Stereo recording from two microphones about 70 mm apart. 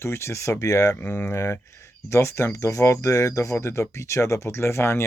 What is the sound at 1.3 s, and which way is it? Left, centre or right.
Speech, left.